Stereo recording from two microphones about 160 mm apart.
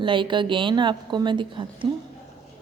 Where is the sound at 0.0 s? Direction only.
30° right (ahead or behind).